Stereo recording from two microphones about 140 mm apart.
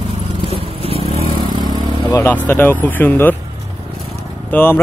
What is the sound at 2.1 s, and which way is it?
Speech, 15° left (ahead or behind).